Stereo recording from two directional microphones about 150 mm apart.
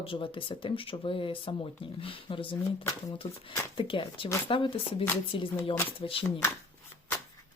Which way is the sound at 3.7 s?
35° left (ahead or behind).